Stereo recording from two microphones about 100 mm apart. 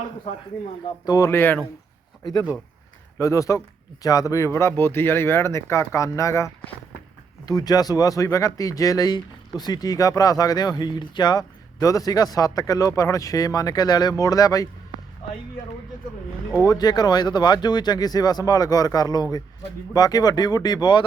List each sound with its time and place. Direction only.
1.0 s speech: 40° left (ahead or behind)
1.3 s speech: 20° left (ahead or behind)
2.2 s speech: 45° left (ahead or behind)
3.2 s speech: 30° left (ahead or behind)
7.4 s speech: 40° left (ahead or behind)
11.8 s speech: 35° left (ahead or behind)
16.6 s speech: 40° left (ahead or behind)